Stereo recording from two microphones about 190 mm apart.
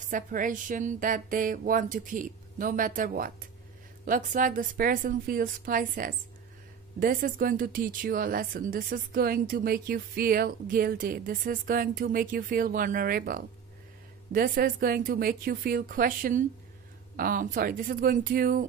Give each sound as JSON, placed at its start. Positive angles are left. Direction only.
{"t": 0.0, "sound": "a woman's voice", "side_deg": -45}